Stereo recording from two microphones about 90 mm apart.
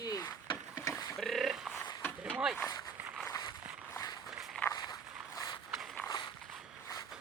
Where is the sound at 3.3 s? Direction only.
50° left (ahead or behind).